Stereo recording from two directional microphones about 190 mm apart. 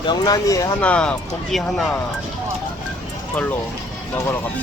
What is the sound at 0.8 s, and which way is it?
Speech, 5° left (ahead or behind).